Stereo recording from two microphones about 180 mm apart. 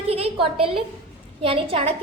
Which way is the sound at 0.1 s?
30° right (ahead or behind).